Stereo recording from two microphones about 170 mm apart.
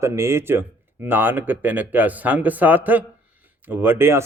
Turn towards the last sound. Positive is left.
turn(degrees=-15)  # may be behind; listen again after turning